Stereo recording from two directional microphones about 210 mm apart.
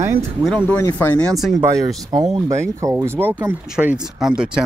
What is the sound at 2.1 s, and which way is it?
Speech, 30° right (ahead or behind).